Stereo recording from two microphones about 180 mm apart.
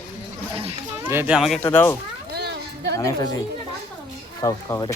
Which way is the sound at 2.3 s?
70° right (ahead or behind).